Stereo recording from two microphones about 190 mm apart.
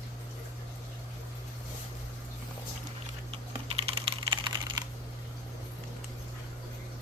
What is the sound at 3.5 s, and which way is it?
Typing, 25° right (ahead or behind).